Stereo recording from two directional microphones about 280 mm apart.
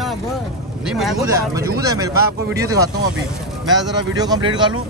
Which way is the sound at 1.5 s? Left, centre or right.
Centre.